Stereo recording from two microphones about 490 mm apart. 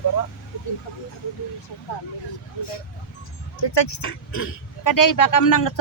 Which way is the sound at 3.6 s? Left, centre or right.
Left.